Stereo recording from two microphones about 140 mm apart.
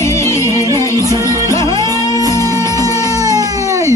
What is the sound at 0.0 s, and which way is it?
Music, 20° left (ahead or behind).